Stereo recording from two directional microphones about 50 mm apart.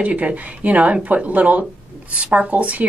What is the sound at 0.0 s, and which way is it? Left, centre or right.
Speech, right.